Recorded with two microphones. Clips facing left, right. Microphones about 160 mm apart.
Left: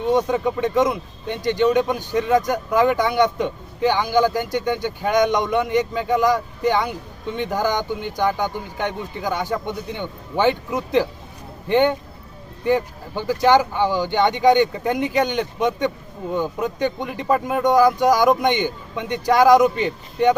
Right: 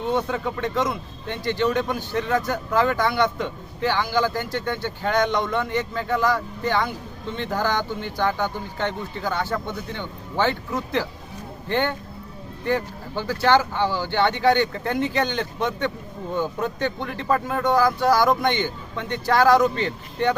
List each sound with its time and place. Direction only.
0.1 s speech: 15° left (ahead or behind)